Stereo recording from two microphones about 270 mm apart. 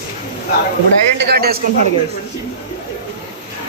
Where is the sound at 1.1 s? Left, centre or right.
Right.